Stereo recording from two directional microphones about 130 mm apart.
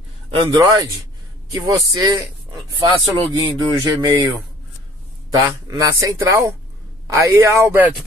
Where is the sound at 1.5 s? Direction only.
30° right (ahead or behind).